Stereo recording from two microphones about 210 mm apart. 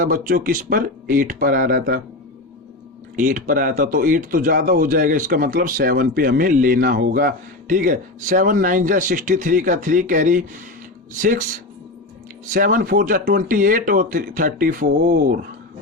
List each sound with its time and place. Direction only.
0.0 s a man's voice: 40° right (ahead or behind)
3.2 s a man's voice: 40° right (ahead or behind)
12.5 s a man's voice: 40° right (ahead or behind)